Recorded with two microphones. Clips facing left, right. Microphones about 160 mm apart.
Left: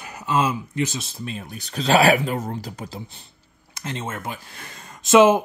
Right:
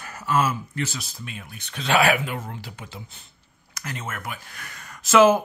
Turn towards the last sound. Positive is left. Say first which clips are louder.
# left 2 dB
turn(degrees=20)  # may be behind; listen again after turning